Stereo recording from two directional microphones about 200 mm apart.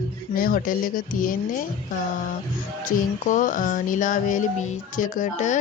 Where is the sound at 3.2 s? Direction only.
40° left (ahead or behind).